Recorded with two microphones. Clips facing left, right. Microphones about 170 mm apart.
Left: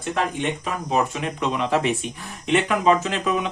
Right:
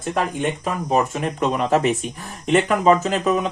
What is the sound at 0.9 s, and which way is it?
Speech, 45° right (ahead or behind).